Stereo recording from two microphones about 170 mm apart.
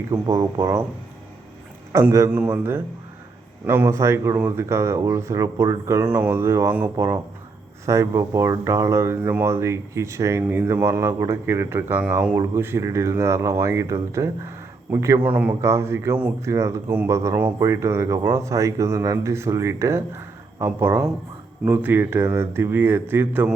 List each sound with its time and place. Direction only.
0.1 s speech: 20° right (ahead or behind)
1.9 s a man's voice: 20° right (ahead or behind)